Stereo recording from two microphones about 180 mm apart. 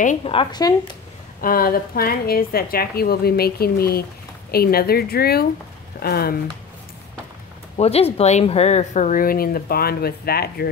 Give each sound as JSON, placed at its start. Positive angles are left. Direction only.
{"t": 0.2, "sound": "speech", "side_deg": 30}
{"t": 1.4, "sound": "a woman's voice", "side_deg": 55}
{"t": 7.7, "sound": "speech", "side_deg": 35}